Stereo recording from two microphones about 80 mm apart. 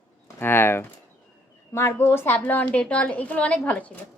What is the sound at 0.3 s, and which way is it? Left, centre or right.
A woman's voice, left.